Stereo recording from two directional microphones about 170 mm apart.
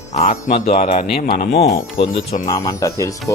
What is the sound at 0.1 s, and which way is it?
Speech, 40° left (ahead or behind).